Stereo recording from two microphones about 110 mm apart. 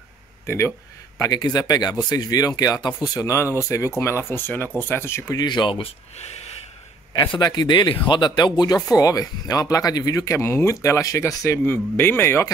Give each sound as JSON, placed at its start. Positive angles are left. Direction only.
{"t": 0.5, "sound": "speech", "side_deg": 20}
{"t": 1.3, "sound": "speech", "side_deg": 40}
{"t": 5.4, "sound": "speech", "side_deg": 45}
{"t": 7.3, "sound": "speech", "side_deg": 40}